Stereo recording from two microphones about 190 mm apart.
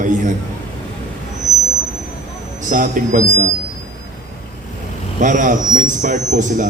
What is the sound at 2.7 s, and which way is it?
Speech, 40° right (ahead or behind).